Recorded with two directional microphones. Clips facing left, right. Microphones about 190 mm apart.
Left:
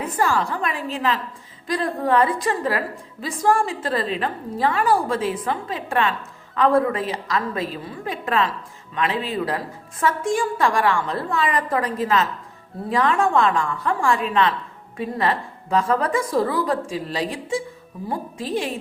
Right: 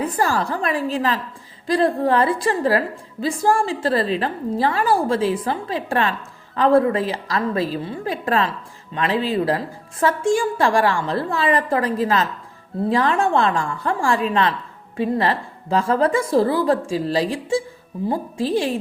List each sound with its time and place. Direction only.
0.0 s a woman's voice: 35° right (ahead or behind)